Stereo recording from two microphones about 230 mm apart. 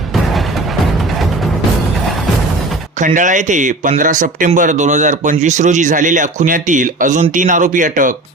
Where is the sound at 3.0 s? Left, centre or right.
Right.